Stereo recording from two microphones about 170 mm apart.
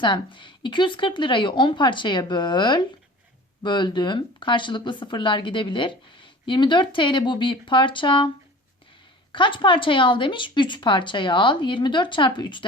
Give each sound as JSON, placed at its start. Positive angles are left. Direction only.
{"t": 0.0, "sound": "speech", "side_deg": 30}
{"t": 9.3, "sound": "speech", "side_deg": 30}